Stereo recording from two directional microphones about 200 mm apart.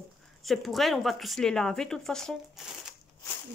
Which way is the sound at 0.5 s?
Centre (ahead or behind).